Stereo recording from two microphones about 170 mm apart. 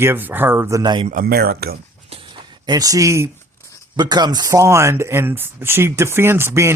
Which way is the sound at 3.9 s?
25° right (ahead or behind).